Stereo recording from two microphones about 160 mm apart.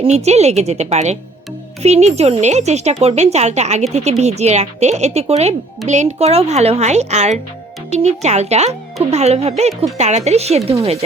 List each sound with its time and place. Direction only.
0.0 s speech: 40° right (ahead or behind)